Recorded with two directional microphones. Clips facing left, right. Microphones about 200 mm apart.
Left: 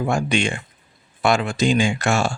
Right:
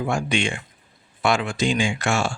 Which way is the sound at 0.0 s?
40° left (ahead or behind).